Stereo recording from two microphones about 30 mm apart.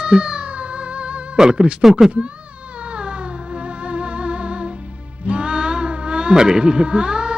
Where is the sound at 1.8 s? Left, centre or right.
Centre.